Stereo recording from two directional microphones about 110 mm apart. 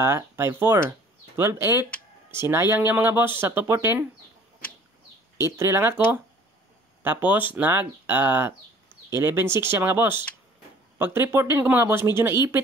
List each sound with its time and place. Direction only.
0.0 s speech: 20° right (ahead or behind)
5.4 s speech: 25° right (ahead or behind)